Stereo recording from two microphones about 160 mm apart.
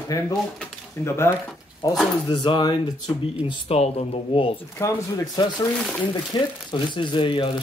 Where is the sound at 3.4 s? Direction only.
40° left (ahead or behind).